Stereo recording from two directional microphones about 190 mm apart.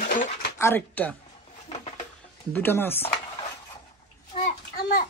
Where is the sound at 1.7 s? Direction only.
35° left (ahead or behind).